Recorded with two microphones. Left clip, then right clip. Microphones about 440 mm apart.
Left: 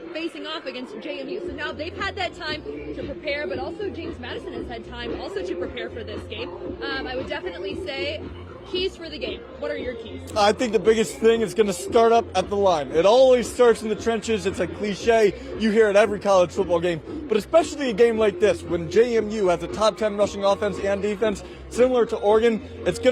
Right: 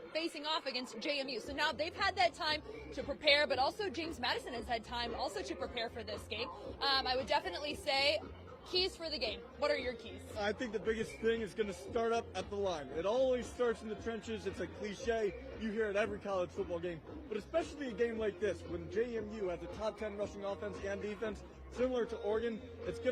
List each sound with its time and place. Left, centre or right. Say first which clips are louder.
0.1 s a woman's voice: left 6 dB; right
5.2 s a woman's voice: left 11 dB; right
6.8 s a woman's voice: left 4 dB; right
10.4 s a man's voice: left 18 dB; left